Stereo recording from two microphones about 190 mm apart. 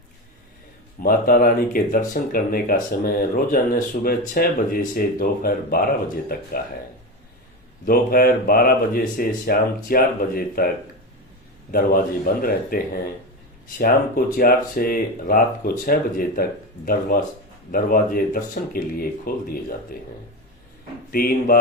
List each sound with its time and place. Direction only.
0.9 s speech: 50° left (ahead or behind)
7.9 s speech: 50° left (ahead or behind)
11.7 s speech: 50° left (ahead or behind)
21.1 s speech: 50° left (ahead or behind)